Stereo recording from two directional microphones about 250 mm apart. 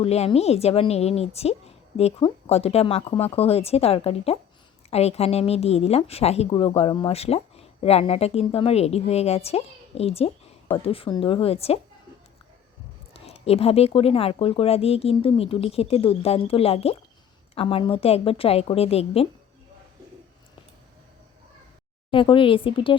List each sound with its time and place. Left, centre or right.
0.0 s speech: left
13.1 s speech: left
22.1 s speech: centre